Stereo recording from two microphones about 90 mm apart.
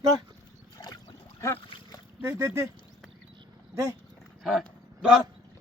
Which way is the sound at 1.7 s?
70° left (ahead or behind).